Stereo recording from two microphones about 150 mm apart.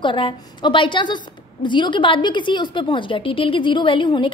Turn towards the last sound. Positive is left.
turn(degrees=35)  # may be behind; listen again after turning